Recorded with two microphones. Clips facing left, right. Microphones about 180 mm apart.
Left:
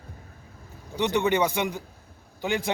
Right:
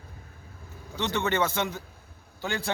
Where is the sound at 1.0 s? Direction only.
15° left (ahead or behind).